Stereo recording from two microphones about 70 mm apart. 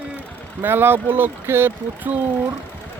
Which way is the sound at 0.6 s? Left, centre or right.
Right.